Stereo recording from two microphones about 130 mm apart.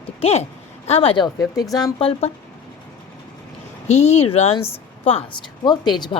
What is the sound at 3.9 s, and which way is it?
A woman's voice, 55° left (ahead or behind).